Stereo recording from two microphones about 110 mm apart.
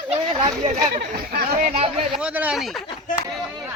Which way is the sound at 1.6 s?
70° right (ahead or behind).